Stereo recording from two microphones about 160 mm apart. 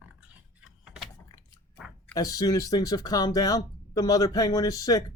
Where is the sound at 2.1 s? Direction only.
25° left (ahead or behind).